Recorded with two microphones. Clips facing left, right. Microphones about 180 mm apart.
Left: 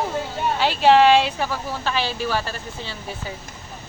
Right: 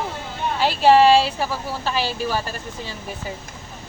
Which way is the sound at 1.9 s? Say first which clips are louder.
Right 1 dB; 40° right (ahead or behind).